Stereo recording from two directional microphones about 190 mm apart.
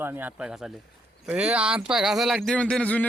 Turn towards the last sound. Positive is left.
turn(degrees=5)  # may be behind; listen again after turning